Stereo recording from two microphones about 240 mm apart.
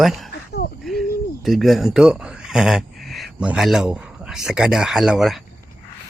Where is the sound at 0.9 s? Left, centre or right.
Centre.